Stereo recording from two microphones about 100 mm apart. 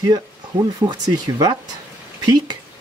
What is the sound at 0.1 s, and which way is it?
Speech, 45° right (ahead or behind).